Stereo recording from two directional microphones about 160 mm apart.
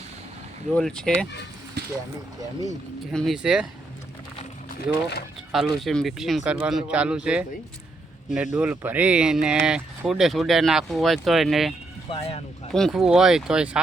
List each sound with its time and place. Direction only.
0.7 s speech: 5° left (ahead or behind)
1.8 s vehicle: 90° right
3.1 s speech: centre (ahead or behind)
5.5 s speech: centre (ahead or behind)
12.0 s speech: 35° left (ahead or behind)
12.7 s speech: centre (ahead or behind)